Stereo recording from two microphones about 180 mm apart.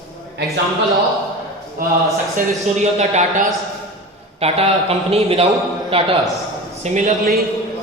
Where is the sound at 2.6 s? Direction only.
35° right (ahead or behind).